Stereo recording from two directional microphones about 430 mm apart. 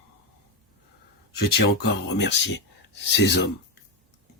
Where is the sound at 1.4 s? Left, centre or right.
Left.